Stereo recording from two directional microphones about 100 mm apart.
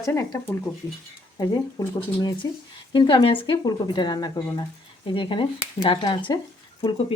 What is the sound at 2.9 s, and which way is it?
Speech, 55° left (ahead or behind).